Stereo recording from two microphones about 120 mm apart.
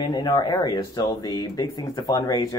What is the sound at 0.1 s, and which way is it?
Speech, 35° left (ahead or behind).